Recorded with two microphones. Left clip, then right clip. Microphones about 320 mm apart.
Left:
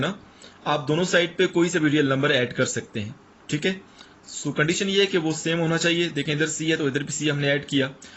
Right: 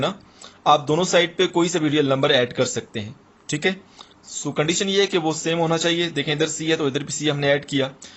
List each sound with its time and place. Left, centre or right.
0.6 s speech: centre